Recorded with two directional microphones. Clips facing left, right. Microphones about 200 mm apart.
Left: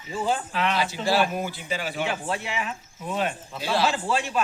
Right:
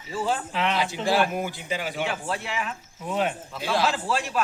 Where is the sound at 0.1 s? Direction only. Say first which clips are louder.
Left 1 dB; centre (ahead or behind).